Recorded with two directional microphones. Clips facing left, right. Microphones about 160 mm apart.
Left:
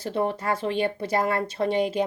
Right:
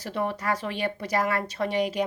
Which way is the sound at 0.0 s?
30° left (ahead or behind).